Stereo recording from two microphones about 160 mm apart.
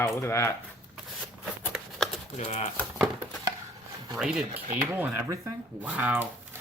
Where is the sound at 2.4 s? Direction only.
40° left (ahead or behind).